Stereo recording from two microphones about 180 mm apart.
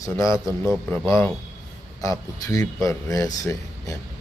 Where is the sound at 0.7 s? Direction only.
Centre (ahead or behind).